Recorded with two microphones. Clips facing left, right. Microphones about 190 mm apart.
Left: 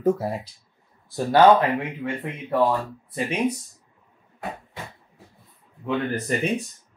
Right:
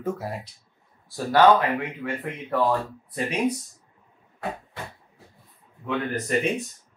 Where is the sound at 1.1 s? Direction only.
20° left (ahead or behind).